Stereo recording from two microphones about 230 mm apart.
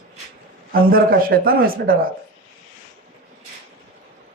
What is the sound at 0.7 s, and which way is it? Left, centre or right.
Speech, right.